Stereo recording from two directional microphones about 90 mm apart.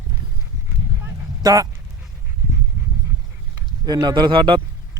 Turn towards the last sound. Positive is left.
turn(degrees=-70)  # may be behind; listen again after turning